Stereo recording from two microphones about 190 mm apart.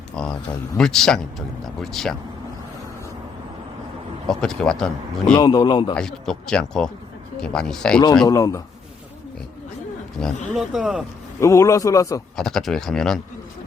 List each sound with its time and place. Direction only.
0.2 s speech: 5° left (ahead or behind)
4.3 s speech: 5° left (ahead or behind)
5.3 s speech: 20° left (ahead or behind)
5.9 s speech: 5° left (ahead or behind)
8.3 s a man's voice: 15° left (ahead or behind)
10.2 s speech: centre (ahead or behind)
11.3 s a man's voice: 15° left (ahead or behind)
12.4 s speech: centre (ahead or behind)